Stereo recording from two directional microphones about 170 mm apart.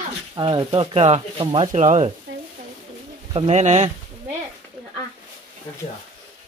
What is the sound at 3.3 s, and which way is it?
Speech, 40° right (ahead or behind).